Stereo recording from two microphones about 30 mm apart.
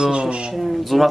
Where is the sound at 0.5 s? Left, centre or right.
Centre.